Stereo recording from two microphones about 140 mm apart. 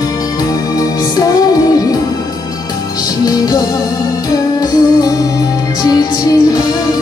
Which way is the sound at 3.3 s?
25° left (ahead or behind).